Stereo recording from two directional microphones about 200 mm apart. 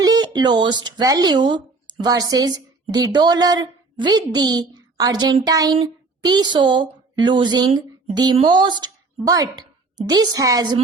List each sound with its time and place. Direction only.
0.0 s a woman's voice: 20° right (ahead or behind)